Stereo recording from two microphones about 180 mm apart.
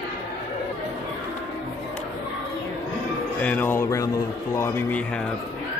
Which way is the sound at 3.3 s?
10° left (ahead or behind).